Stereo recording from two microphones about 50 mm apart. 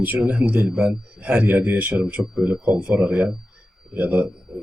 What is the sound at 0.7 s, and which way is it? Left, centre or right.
Speech, centre.